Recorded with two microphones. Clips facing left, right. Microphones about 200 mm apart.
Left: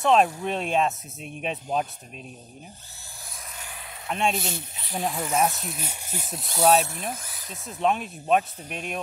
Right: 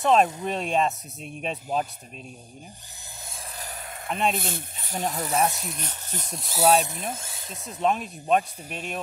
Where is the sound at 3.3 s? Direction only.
30° right (ahead or behind); by 4.1 s 50° right (ahead or behind).